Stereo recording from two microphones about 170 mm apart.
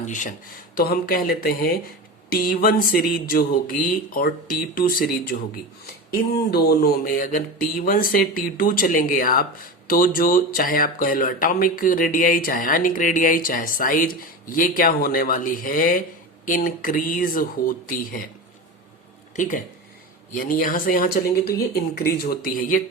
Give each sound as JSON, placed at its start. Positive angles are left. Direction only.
{"t": 0.0, "sound": "speech", "side_deg": 50}
{"t": 6.3, "sound": "speech", "side_deg": 65}
{"t": 19.4, "sound": "speech", "side_deg": 50}